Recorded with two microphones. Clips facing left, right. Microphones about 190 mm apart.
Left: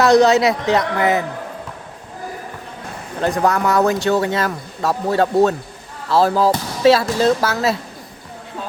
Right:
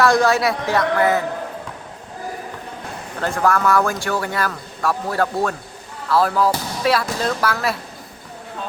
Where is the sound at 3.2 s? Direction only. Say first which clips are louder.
Left 2 dB; 20° left (ahead or behind).